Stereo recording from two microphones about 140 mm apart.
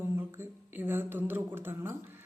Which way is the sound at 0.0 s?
15° right (ahead or behind).